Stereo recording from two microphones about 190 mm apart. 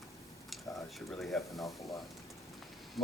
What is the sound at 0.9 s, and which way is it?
Speech, centre (ahead or behind).